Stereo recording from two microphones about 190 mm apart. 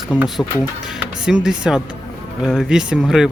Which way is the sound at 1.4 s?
5° right (ahead or behind).